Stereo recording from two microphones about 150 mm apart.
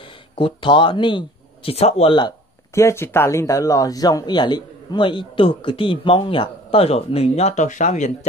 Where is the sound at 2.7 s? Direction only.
20° left (ahead or behind).